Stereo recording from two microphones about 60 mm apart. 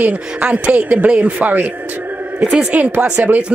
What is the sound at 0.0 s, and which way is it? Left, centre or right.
Speech, right.